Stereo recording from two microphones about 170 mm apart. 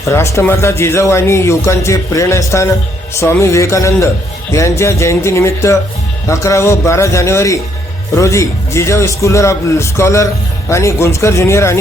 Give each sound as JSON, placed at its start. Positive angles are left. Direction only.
{"t": 0.0, "sound": "speech", "side_deg": 15}